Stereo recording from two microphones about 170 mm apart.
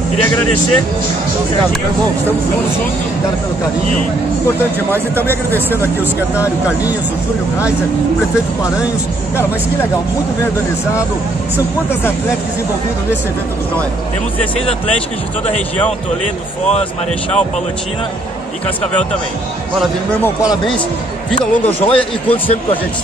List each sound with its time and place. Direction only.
4.9 s speech: 15° right (ahead or behind)
5.3 s speech: 10° left (ahead or behind)
6.4 s speech: 10° right (ahead or behind)
21.3 s speech: 10° left (ahead or behind)
22.3 s speech: 35° left (ahead or behind)